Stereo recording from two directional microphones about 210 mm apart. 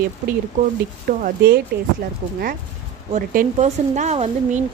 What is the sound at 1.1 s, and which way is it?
Speech, 40° right (ahead or behind).